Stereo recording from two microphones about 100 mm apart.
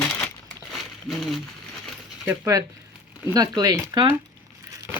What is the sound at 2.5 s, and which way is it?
Speech, 40° right (ahead or behind).